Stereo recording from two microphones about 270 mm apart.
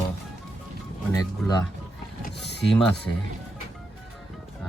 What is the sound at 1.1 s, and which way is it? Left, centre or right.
Speech, centre.